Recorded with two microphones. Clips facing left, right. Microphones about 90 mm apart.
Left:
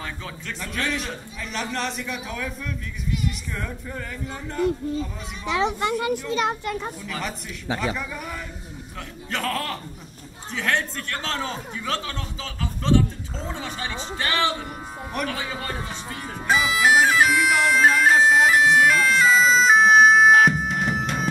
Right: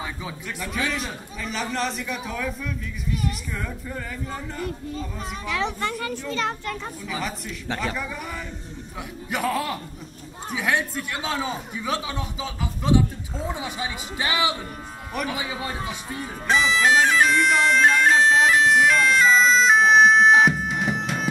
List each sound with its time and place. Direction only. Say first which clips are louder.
0.0 s a man's voice: right 1 dB; 10° right (ahead or behind)
5.5 s a child's voice: left 4 dB; 20° left (ahead or behind)
7.1 s a man's voice: right 1 dB; centre (ahead or behind)
9.3 s a man's voice: right 2 dB; 10° right (ahead or behind)
16.2 s bagpipes: even; 5° left (ahead or behind)